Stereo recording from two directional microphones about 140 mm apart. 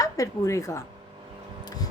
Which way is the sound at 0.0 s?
25° left (ahead or behind).